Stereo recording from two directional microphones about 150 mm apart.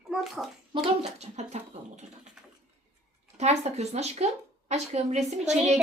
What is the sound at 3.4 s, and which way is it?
Speech, 45° right (ahead or behind).